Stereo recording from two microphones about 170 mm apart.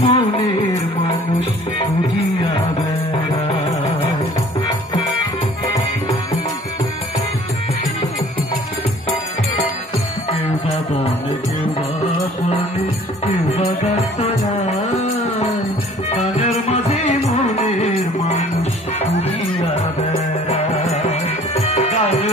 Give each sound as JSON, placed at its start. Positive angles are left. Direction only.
{"t": 0.0, "sound": "music", "side_deg": 35}
{"t": 3.4, "sound": "music", "side_deg": 35}
{"t": 16.3, "sound": "music", "side_deg": 40}
{"t": 20.4, "sound": "music", "side_deg": 40}